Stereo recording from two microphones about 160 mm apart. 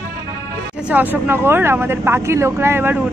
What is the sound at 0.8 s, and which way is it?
Speech, 10° right (ahead or behind).